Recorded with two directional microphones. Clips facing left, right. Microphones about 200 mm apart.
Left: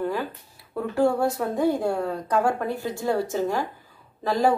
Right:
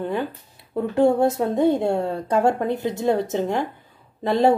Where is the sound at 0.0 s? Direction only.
20° right (ahead or behind).